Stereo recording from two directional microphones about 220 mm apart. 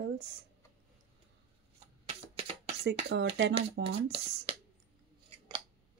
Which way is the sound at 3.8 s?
25° right (ahead or behind).